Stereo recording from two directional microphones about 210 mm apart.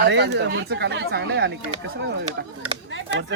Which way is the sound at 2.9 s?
60° right (ahead or behind).